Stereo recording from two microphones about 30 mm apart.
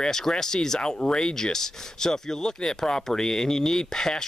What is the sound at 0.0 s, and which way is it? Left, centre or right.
Speech, centre.